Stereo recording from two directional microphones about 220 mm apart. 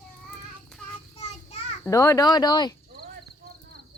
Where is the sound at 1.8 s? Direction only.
15° left (ahead or behind).